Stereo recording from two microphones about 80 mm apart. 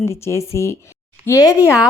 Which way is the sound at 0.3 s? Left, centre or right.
Left.